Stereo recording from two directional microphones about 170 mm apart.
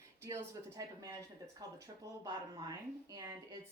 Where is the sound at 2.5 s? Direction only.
20° right (ahead or behind).